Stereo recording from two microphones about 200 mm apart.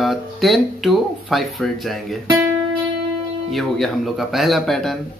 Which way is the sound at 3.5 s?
Centre (ahead or behind).